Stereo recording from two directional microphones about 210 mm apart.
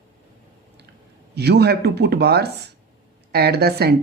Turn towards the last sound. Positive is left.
turn(degrees=-50)  # may be behind; listen again after turning